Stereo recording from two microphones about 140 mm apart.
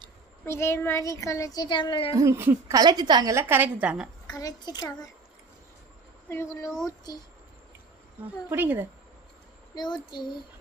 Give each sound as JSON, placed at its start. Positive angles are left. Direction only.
{"t": 0.4, "sound": "speech", "side_deg": 20}
{"t": 2.1, "sound": "a woman's voice", "side_deg": -20}
{"t": 2.7, "sound": "a woman's voice", "side_deg": -30}
{"t": 3.5, "sound": "a woman's voice", "side_deg": -10}
{"t": 4.3, "sound": "speech", "side_deg": 25}
{"t": 6.2, "sound": "speech", "side_deg": 20}
{"t": 8.4, "sound": "a woman's voice", "side_deg": -15}
{"t": 9.7, "sound": "a child's voice", "side_deg": 30}